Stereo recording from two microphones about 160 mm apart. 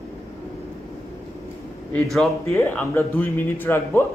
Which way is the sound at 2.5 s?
15° left (ahead or behind).